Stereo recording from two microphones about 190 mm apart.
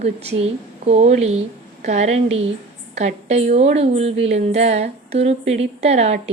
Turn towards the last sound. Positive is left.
turn(degrees=-35)  # may be behind; listen again after turning